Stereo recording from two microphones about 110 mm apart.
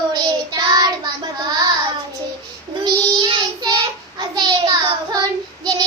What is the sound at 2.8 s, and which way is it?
Child singing, 45° right (ahead or behind).